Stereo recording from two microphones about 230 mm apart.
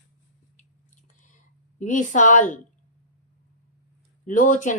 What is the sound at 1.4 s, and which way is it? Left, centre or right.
Speech, left.